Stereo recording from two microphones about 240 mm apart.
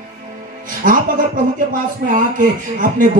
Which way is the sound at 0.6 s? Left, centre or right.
Right.